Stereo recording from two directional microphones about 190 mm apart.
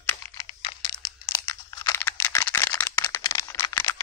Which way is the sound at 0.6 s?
25° left (ahead or behind).